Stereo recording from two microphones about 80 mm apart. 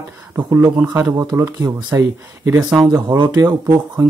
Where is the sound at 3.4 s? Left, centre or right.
Right.